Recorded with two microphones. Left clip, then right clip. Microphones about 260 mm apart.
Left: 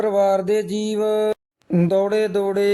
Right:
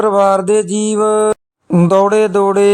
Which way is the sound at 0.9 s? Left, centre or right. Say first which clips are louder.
Right 7 dB; right.